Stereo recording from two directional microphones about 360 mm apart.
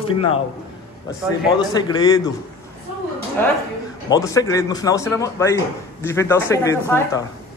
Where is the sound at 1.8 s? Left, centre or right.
Centre.